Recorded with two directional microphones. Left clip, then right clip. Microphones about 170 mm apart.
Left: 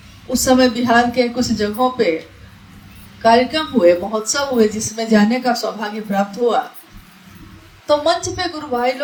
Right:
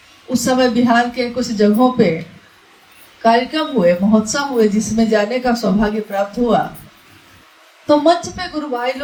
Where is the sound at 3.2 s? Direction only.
45° left (ahead or behind).